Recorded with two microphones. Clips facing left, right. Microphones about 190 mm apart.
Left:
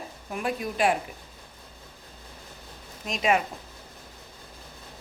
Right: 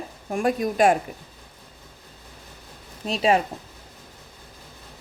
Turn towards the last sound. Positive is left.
turn(degrees=-30)  # may be behind; listen again after turning